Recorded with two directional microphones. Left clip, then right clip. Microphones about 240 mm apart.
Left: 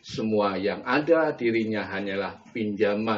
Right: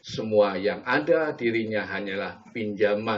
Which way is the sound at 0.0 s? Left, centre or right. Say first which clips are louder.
Right 3 dB; right.